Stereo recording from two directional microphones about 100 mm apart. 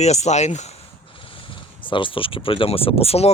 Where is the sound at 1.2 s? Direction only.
60° left (ahead or behind); by 3.3 s 85° left.